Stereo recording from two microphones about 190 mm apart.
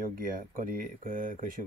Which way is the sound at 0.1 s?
45° right (ahead or behind).